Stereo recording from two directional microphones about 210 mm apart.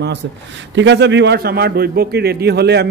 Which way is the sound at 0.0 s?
55° right (ahead or behind).